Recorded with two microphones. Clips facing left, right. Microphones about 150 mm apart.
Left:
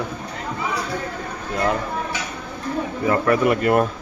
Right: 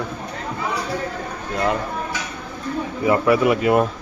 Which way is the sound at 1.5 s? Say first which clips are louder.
Even; centre (ahead or behind).